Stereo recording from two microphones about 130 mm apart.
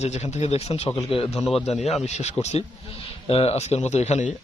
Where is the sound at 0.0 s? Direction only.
60° left (ahead or behind).